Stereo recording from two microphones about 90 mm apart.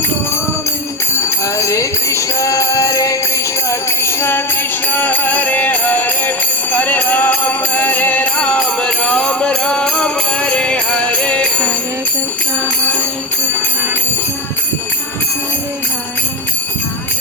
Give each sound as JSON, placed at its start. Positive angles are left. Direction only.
{"t": 1.5, "sound": "music", "side_deg": 35}
{"t": 3.7, "sound": "jingle bell", "side_deg": 30}
{"t": 4.9, "sound": "music", "side_deg": 20}